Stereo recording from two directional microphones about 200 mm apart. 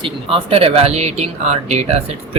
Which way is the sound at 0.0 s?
25° right (ahead or behind).